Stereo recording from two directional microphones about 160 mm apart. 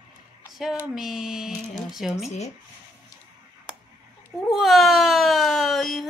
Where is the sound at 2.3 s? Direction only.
45° left (ahead or behind).